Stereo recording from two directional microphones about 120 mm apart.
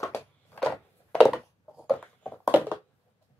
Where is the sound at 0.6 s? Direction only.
Centre (ahead or behind).